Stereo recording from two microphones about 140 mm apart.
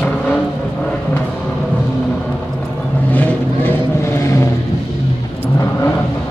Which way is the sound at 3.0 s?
10° left (ahead or behind).